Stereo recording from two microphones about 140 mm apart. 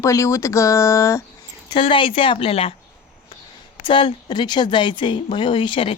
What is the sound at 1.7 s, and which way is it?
A woman's voice, 35° left (ahead or behind).